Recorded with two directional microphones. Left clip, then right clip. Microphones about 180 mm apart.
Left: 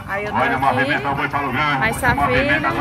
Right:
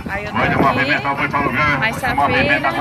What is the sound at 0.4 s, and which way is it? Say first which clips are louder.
Speech: right 2 dB; 55° left (ahead or behind).